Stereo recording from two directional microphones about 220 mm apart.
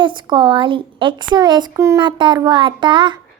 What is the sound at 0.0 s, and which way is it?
A child's voice, 20° right (ahead or behind).